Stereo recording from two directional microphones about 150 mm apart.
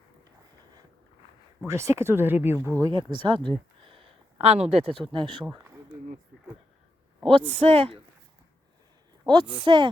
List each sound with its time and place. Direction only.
1.6 s speech: 20° right (ahead or behind)
2.9 s a man's voice: 35° right (ahead or behind)
3.8 s a sound: 35° right (ahead or behind)
5.1 s a man's voice: 35° right (ahead or behind)
7.3 s a man's voice: 40° right (ahead or behind)
9.2 s a woman's voice: 30° right (ahead or behind)